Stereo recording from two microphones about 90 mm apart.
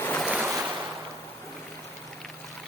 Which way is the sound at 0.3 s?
10° right (ahead or behind).